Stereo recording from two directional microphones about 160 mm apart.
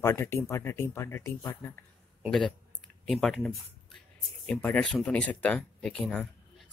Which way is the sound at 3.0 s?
Centre (ahead or behind).